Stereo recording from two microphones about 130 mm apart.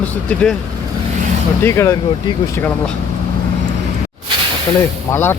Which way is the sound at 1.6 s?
20° left (ahead or behind).